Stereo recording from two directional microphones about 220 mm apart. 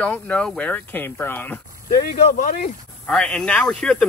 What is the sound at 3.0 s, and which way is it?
Speech, 5° left (ahead or behind).